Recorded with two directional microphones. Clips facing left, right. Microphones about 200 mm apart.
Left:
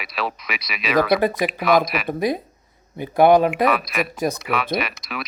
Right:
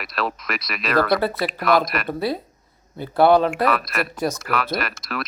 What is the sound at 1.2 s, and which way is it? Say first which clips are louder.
Speech: left 3 dB; 15° left (ahead or behind).